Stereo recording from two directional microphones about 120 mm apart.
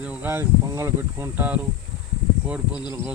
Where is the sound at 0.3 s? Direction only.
20° right (ahead or behind).